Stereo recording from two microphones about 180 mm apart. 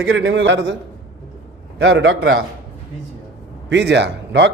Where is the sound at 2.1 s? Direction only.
75° right (ahead or behind).